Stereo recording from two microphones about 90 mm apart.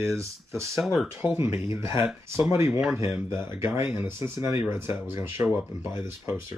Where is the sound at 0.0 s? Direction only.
30° right (ahead or behind).